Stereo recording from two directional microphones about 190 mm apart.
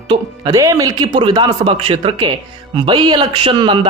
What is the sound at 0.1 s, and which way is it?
Speech, 20° right (ahead or behind).